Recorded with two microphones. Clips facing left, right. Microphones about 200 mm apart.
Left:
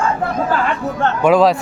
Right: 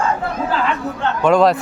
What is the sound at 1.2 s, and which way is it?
Speech, 5° left (ahead or behind).